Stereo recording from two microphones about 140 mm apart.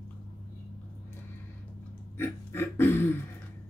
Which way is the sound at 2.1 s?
15° left (ahead or behind).